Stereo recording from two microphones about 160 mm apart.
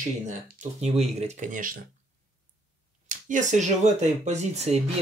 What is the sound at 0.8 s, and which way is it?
Speech, 40° right (ahead or behind).